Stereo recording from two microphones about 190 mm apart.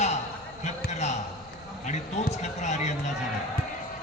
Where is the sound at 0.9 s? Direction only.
35° left (ahead or behind).